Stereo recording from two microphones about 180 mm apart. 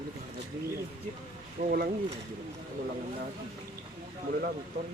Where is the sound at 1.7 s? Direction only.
50° right (ahead or behind).